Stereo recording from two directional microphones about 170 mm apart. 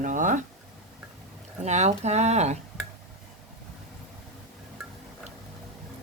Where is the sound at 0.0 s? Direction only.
50° right (ahead or behind).